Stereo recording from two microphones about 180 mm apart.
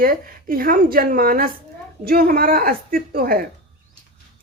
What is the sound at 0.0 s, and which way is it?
Speech, 55° right (ahead or behind).